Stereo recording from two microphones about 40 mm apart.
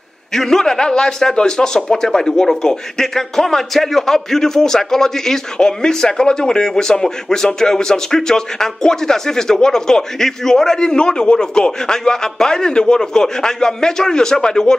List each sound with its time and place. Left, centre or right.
0.3 s a man's voice: centre